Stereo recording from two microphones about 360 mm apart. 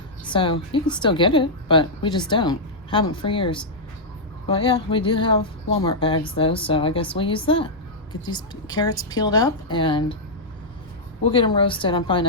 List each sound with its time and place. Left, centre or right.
0.3 s speech: centre
11.2 s speech: centre